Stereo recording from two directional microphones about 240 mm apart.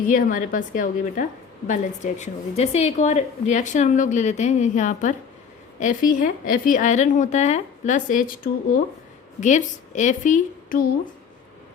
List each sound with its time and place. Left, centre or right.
0.0 s a woman's voice: left
9.4 s a woman's voice: left